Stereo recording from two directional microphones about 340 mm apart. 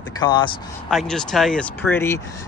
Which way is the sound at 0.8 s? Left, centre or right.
Centre.